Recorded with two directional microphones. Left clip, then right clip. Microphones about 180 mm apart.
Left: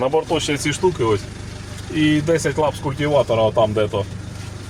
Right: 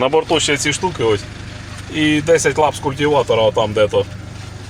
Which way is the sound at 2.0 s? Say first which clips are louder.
Right 4 dB; 55° right (ahead or behind).